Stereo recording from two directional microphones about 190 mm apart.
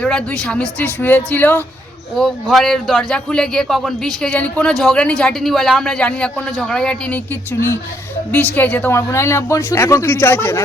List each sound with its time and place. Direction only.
0.0 s a woman's voice: 5° left (ahead or behind)
8.3 s a woman's voice: 5° left (ahead or behind)